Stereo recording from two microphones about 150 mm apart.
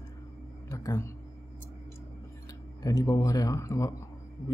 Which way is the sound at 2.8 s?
25° left (ahead or behind).